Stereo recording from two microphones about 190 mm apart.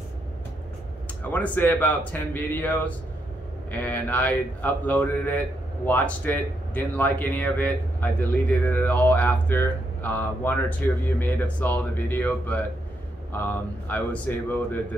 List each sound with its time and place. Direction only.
1.2 s speech: 10° left (ahead or behind)